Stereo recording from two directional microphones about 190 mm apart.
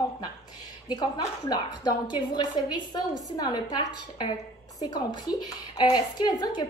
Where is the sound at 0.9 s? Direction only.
20° left (ahead or behind).